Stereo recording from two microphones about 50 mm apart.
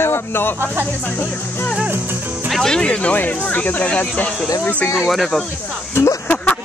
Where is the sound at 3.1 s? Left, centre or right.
Left.